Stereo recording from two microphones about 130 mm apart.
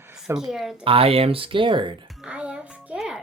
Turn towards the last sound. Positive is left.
turn(degrees=-5)  # may be behind; listen again after turning